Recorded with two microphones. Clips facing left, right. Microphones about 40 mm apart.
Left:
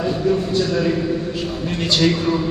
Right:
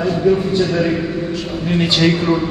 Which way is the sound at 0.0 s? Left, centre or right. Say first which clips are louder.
Right 4 dB; centre.